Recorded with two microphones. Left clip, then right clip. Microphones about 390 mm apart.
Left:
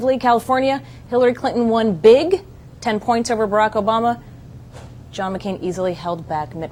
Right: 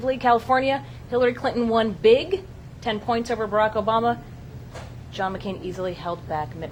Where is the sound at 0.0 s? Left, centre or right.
Left.